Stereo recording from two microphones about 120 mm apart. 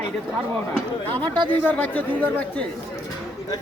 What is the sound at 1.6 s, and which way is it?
Speech, 15° left (ahead or behind).